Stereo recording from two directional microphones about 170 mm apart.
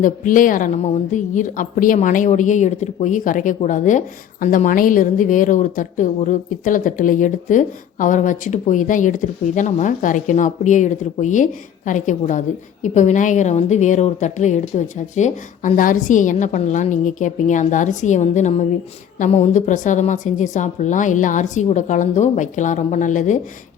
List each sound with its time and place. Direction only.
0.0 s speech: 50° left (ahead or behind)